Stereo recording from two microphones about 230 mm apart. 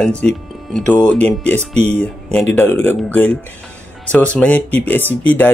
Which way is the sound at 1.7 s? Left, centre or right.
Right.